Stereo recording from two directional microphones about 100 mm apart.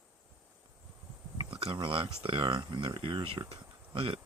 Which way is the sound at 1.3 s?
60° right (ahead or behind).